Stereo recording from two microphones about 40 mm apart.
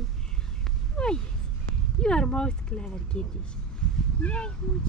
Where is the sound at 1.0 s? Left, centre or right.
Left.